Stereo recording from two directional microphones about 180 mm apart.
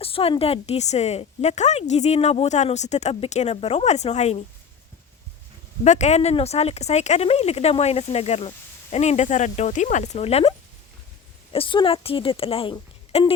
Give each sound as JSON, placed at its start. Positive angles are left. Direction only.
{"t": 0.0, "sound": "speech", "side_deg": 30}
{"t": 5.8, "sound": "speech", "side_deg": 40}
{"t": 11.5, "sound": "speech", "side_deg": 30}